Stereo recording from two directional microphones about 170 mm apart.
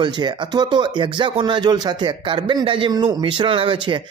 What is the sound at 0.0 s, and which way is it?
Speech, 25° right (ahead or behind).